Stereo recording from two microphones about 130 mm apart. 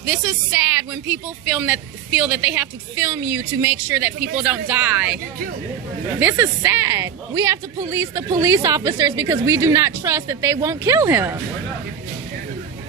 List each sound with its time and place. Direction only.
0.0 s a woman's voice: 25° right (ahead or behind)
6.1 s a woman's voice: 15° right (ahead or behind)